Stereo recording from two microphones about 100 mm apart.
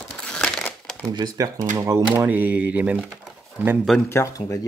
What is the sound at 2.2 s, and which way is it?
Speech, 15° right (ahead or behind).